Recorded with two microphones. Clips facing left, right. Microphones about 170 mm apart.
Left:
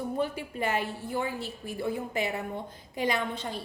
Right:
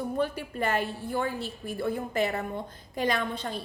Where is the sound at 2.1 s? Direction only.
15° left (ahead or behind).